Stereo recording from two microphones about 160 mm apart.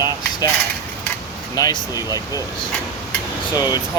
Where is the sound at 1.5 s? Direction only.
20° left (ahead or behind).